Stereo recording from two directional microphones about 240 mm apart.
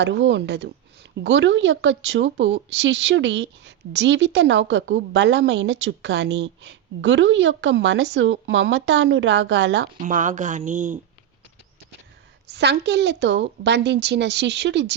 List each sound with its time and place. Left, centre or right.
0.0 s a woman's voice: right
10.0 s speech: right
12.5 s a woman's voice: right